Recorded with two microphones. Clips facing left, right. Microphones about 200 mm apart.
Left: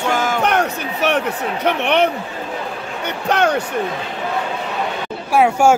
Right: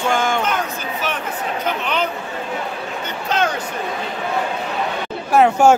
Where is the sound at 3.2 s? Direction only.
65° left (ahead or behind).